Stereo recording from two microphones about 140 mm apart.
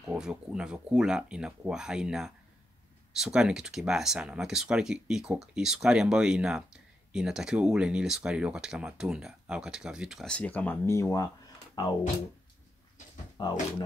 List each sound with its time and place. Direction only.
0.0 s speech: 5° right (ahead or behind); by 11.9 s 30° left (ahead or behind)
13.4 s speech: 35° left (ahead or behind)